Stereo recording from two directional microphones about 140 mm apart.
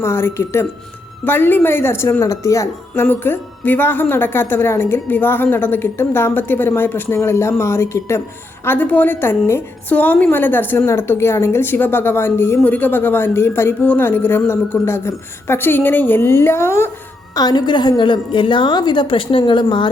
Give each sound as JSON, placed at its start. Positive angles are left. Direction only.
{"t": 0.0, "sound": "a woman's voice", "side_deg": 20}
{"t": 17.3, "sound": "a woman's voice", "side_deg": 30}